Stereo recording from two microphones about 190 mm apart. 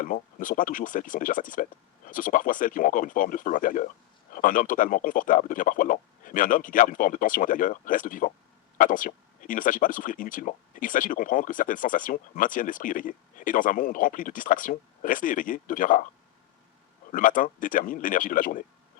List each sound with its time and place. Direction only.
0.0 s speech: 45° left (ahead or behind)
17.1 s speech: 45° left (ahead or behind)